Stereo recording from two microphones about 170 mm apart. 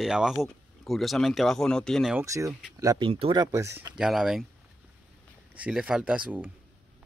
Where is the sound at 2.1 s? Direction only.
20° right (ahead or behind).